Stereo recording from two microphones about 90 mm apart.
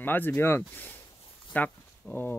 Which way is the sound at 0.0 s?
20° left (ahead or behind).